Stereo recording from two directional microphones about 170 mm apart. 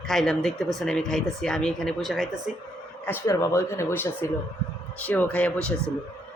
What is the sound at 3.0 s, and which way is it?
Speech, 15° left (ahead or behind).